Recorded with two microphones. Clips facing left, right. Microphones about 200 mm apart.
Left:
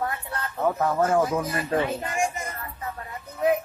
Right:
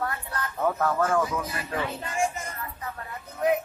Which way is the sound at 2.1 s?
15° left (ahead or behind).